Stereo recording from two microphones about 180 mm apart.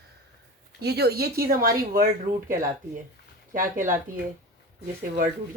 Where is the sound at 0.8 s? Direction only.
65° right (ahead or behind).